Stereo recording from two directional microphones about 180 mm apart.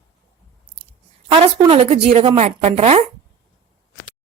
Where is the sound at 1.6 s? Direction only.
30° right (ahead or behind).